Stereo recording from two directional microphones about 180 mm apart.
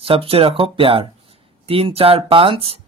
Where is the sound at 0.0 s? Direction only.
30° right (ahead or behind).